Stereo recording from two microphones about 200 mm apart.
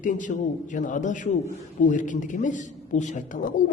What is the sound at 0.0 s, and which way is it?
A man's voice, 40° left (ahead or behind).